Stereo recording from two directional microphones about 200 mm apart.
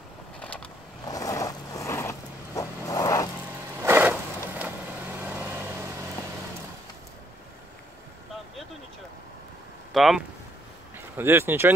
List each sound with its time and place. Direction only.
0.4 s vehicle: 5° left (ahead or behind)
1.0 s vehicle: 15° left (ahead or behind)
3.8 s a sound: 10° right (ahead or behind)
4.6 s vehicle: 10° right (ahead or behind)
9.9 s speech: centre (ahead or behind)